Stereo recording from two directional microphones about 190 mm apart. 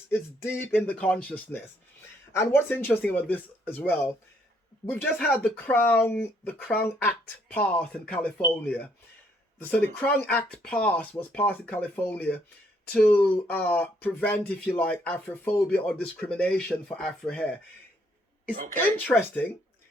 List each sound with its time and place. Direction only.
0.1 s speech: 10° left (ahead or behind)
18.7 s speech: 10° left (ahead or behind)